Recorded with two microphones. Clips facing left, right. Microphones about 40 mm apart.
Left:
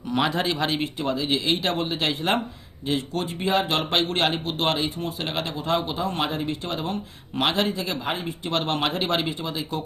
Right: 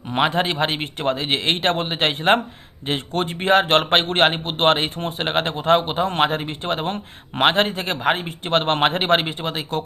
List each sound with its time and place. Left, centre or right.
0.1 s speech: right
0.9 s speech: right